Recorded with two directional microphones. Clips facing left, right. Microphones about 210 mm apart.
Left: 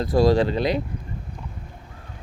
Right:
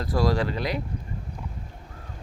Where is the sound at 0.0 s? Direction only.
25° left (ahead or behind).